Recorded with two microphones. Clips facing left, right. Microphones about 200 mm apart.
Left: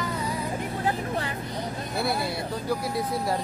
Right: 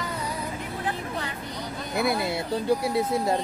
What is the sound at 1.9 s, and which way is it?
Speech, 20° right (ahead or behind).